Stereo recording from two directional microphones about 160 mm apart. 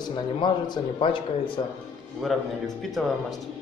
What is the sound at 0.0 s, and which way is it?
A man's voice, 30° left (ahead or behind).